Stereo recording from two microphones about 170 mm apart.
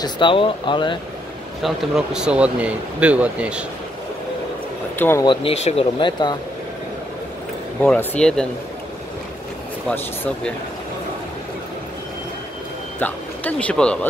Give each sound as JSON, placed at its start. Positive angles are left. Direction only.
{"t": 0.0, "sound": "speech", "side_deg": 30}
{"t": 1.6, "sound": "speech", "side_deg": 0}
{"t": 4.9, "sound": "speech", "side_deg": 10}
{"t": 5.2, "sound": "speech", "side_deg": 30}
{"t": 7.8, "sound": "speech", "side_deg": 10}
{"t": 9.8, "sound": "speech", "side_deg": 5}
{"t": 13.0, "sound": "speech", "side_deg": 10}